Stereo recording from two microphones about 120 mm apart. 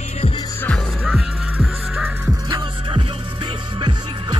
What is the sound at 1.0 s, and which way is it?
Music, 5° right (ahead or behind).